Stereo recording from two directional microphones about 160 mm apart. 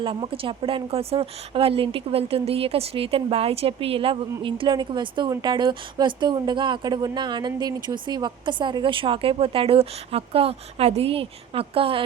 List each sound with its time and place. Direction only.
0.0 s a woman's voice: 35° right (ahead or behind)